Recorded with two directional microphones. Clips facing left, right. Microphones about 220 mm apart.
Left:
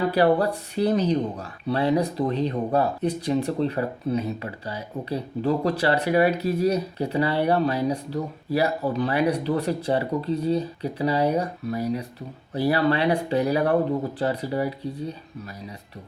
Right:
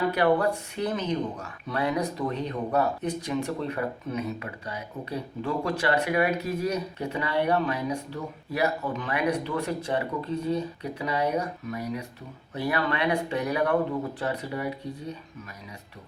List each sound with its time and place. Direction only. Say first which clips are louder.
0.1 s speech: left 3 dB; 35° left (ahead or behind)